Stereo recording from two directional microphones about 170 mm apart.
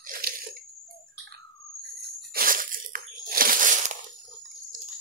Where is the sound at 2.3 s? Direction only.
55° right (ahead or behind).